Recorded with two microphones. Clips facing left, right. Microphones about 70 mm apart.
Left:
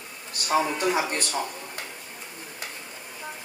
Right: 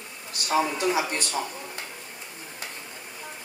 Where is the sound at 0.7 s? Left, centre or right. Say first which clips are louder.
Even; left.